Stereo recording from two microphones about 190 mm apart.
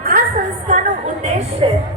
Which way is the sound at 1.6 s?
30° right (ahead or behind).